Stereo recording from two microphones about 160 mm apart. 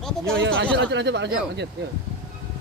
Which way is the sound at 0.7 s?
90° right.